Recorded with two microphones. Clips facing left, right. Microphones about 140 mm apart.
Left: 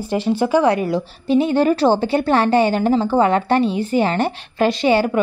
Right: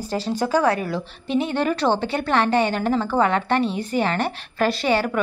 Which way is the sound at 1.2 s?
35° left (ahead or behind).